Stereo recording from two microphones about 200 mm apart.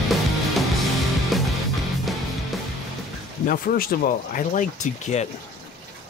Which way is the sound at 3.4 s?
50° left (ahead or behind).